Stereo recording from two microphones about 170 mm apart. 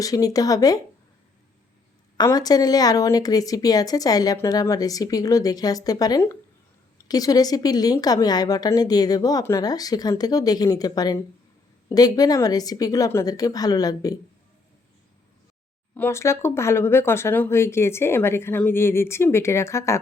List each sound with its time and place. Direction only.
0.0 s a woman's voice: 20° left (ahead or behind)
2.1 s a woman's voice: 20° left (ahead or behind)
16.0 s speech: 15° left (ahead or behind)